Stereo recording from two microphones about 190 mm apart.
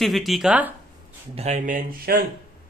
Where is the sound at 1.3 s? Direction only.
35° right (ahead or behind).